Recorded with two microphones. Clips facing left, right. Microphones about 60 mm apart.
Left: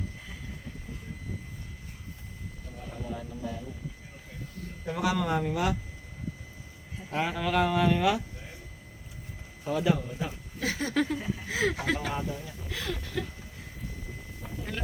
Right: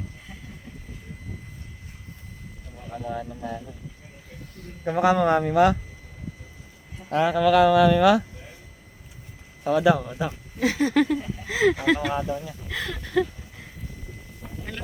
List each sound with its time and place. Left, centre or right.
3.1 s speech: right
4.9 s speech: right
5.2 s speech: right
7.1 s speech: right
9.6 s speech: right
10.7 s a sound: right
10.9 s speech: right
14.4 s boat: centre